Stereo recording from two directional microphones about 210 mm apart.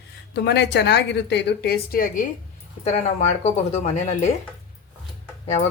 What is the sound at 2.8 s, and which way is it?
Speech, 30° left (ahead or behind).